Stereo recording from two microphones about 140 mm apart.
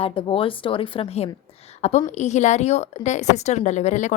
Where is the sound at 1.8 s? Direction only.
55° left (ahead or behind).